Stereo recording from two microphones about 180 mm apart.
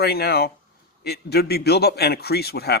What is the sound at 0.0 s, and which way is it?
A man's voice, 60° left (ahead or behind).